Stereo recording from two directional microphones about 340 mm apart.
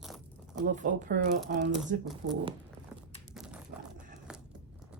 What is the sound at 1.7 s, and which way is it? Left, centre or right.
Speech, centre.